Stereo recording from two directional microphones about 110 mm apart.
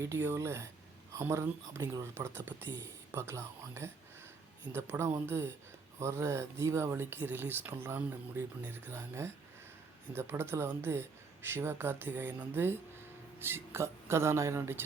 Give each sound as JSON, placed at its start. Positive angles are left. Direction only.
{"t": 0.0, "sound": "speech", "side_deg": -25}